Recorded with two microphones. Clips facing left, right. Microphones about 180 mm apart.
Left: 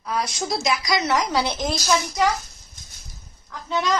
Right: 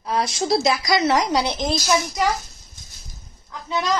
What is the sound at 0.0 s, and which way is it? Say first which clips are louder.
A woman's voice: right 3 dB; 30° right (ahead or behind).